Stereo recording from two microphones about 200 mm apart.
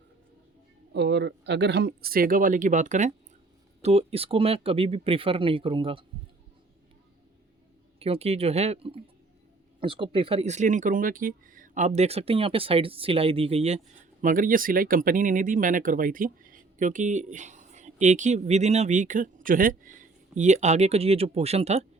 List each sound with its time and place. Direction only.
0.9 s speech: 60° right (ahead or behind); by 6.1 s 25° right (ahead or behind)
7.9 s speech: 30° right (ahead or behind)